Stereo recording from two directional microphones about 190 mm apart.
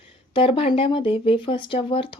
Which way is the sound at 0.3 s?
30° left (ahead or behind).